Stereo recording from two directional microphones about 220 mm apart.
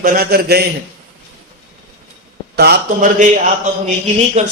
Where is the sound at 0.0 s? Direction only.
40° right (ahead or behind).